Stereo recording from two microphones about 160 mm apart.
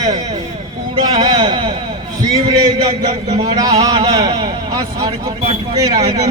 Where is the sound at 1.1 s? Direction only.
25° right (ahead or behind).